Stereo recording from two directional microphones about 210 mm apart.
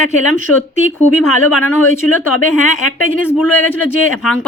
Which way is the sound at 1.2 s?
90° left.